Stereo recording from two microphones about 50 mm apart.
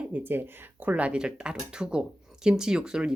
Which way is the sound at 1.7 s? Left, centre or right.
Centre.